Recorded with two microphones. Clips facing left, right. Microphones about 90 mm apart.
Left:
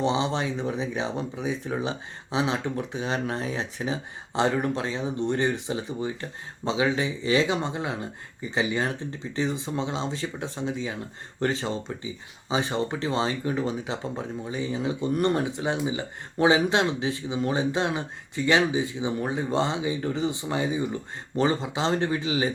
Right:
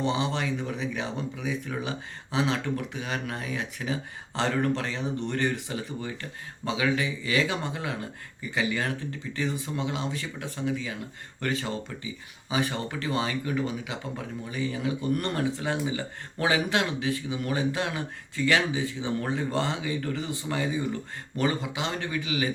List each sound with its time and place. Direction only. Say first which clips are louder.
0.0 s speech: left 3 dB; 25° left (ahead or behind)